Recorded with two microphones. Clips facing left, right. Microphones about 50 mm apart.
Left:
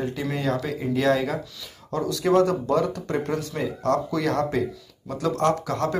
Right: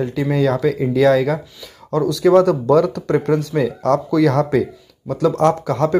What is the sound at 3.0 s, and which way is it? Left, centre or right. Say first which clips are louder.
Speech: right 9 dB; right.